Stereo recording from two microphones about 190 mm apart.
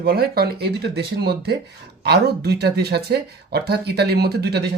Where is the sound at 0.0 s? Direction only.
55° right (ahead or behind).